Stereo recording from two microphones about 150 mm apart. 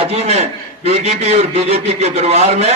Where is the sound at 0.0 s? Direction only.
45° right (ahead or behind).